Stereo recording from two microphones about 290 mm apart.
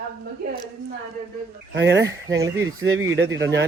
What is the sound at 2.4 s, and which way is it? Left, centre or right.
Speech, centre.